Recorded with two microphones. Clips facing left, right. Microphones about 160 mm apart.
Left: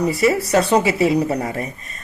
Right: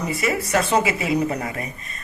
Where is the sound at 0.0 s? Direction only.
35° left (ahead or behind).